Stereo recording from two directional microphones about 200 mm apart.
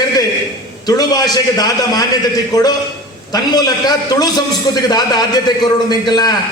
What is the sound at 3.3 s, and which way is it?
A man's voice, 20° left (ahead or behind).